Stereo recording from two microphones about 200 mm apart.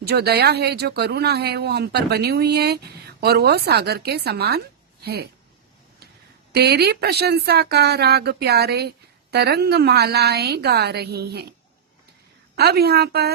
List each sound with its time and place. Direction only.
0.0 s speech: 55° right (ahead or behind)
6.5 s speech: 55° right (ahead or behind)
12.5 s speech: 55° right (ahead or behind)